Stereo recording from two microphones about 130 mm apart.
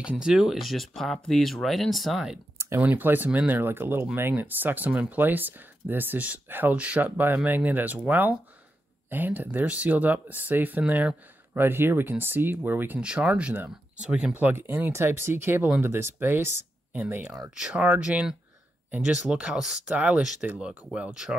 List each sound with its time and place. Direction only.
0.0 s speech: 5° right (ahead or behind)
2.6 s speech: 15° right (ahead or behind)